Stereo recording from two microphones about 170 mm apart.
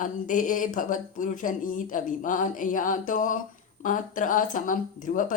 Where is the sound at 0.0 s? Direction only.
50° left (ahead or behind).